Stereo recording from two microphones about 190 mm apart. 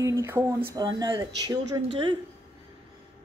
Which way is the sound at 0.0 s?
15° right (ahead or behind).